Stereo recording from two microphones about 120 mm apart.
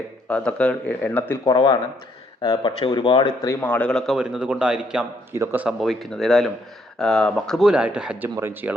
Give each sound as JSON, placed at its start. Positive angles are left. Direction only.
{"t": 0.3, "sound": "speech", "side_deg": 10}
{"t": 1.5, "sound": "speech", "side_deg": 40}
{"t": 3.6, "sound": "a man's voice", "side_deg": 10}
{"t": 5.3, "sound": "speech", "side_deg": -20}
{"t": 5.6, "sound": "a man's voice", "side_deg": 0}
{"t": 8.4, "sound": "speech", "side_deg": -20}